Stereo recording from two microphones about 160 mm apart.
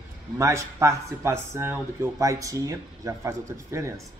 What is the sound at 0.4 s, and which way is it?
A man's voice, 20° right (ahead or behind).